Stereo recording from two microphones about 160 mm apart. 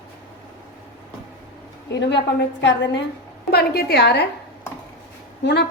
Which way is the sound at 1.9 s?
90° left.